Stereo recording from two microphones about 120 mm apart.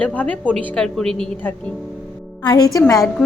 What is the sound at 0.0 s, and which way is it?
A woman's voice, 15° left (ahead or behind).